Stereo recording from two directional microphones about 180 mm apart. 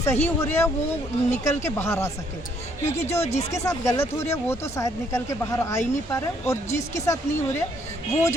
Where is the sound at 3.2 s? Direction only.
35° left (ahead or behind).